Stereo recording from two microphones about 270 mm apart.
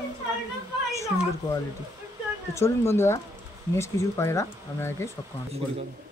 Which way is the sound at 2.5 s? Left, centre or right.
Centre.